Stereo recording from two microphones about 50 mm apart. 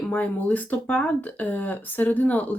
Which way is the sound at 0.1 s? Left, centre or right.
Left.